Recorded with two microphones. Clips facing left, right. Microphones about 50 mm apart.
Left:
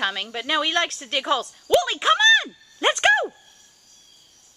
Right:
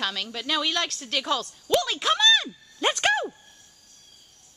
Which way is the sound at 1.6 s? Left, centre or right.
Centre.